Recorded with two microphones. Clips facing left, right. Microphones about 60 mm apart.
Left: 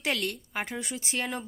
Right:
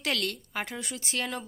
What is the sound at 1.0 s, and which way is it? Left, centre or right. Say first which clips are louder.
Speech: right 1 dB; left.